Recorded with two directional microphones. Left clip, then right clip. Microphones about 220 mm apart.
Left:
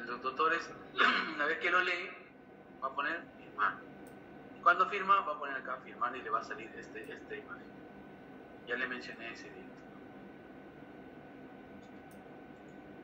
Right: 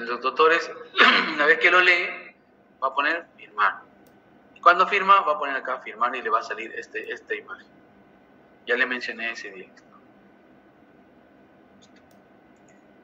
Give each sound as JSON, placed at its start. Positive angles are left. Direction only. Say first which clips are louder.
{"t": 0.0, "sound": "a man's voice", "louder": "right 13 dB", "side_deg": -40}
{"t": 8.6, "sound": "a man's voice", "louder": "right 14 dB", "side_deg": -40}